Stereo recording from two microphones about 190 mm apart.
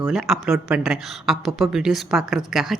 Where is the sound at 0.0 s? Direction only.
Centre (ahead or behind).